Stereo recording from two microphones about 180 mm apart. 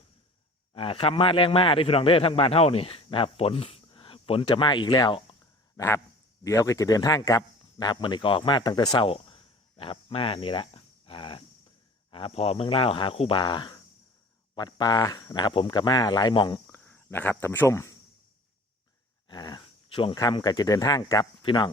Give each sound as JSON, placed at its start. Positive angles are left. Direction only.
{"t": 0.7, "sound": "a man's voice", "side_deg": 30}
{"t": 5.7, "sound": "a man's voice", "side_deg": 15}
{"t": 16.6, "sound": "speech", "side_deg": 5}
{"t": 19.3, "sound": "speech", "side_deg": 20}